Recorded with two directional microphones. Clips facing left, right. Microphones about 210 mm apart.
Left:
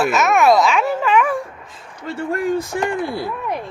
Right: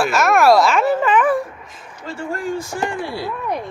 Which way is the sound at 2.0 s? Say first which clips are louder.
Left 4 dB; 60° left (ahead or behind).